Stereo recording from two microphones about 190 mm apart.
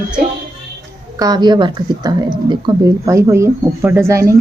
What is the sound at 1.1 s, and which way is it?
Speech, 20° right (ahead or behind).